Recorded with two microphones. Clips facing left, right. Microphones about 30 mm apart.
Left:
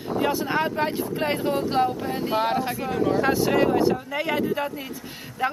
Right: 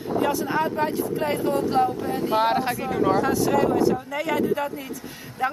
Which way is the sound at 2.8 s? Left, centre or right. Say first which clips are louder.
Right 1 dB; centre.